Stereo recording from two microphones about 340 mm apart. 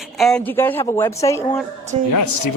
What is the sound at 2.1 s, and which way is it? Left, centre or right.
Speech, left.